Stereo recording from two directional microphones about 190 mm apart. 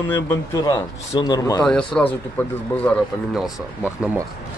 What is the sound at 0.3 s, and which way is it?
Speech, 20° left (ahead or behind).